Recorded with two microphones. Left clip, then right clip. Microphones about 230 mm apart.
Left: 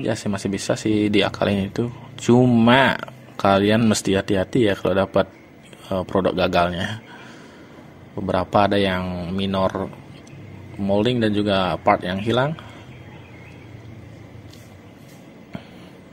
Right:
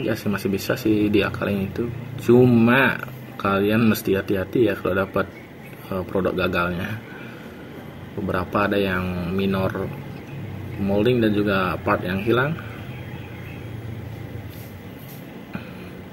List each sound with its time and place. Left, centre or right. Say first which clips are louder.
0.0 s speech: even; left
8.3 s speech: left 4 dB; left
11.0 s speech: right 2 dB; left